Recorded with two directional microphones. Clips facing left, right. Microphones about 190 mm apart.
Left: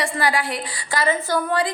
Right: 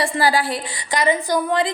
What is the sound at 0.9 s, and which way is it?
Speech, 15° right (ahead or behind).